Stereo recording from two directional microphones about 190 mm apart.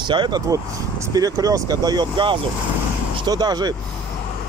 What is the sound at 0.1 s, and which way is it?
Speech, 25° right (ahead or behind).